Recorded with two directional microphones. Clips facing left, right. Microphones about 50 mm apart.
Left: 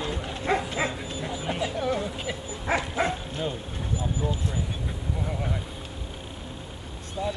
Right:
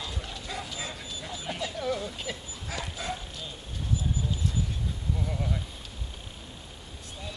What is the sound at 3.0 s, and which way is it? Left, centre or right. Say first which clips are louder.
Bow-wow: left 9 dB; left.